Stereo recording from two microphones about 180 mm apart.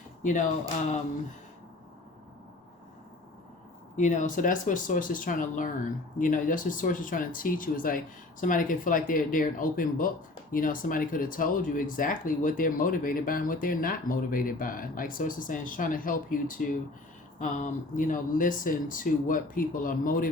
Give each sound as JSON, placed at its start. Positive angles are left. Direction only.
{"t": 0.2, "sound": "speech", "side_deg": 45}
{"t": 3.9, "sound": "speech", "side_deg": 45}